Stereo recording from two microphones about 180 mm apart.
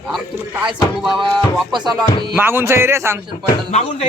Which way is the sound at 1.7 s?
25° right (ahead or behind).